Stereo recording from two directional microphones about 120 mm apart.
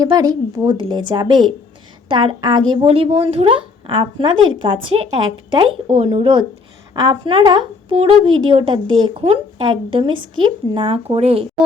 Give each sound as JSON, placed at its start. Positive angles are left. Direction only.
{"t": 0.0, "sound": "a woman's voice", "side_deg": -30}